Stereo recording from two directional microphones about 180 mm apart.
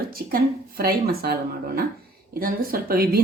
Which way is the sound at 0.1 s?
55° right (ahead or behind).